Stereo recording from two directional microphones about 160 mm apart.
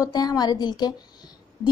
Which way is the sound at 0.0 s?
25° left (ahead or behind).